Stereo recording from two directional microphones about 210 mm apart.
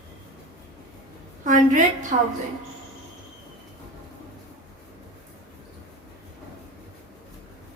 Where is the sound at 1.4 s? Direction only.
35° right (ahead or behind).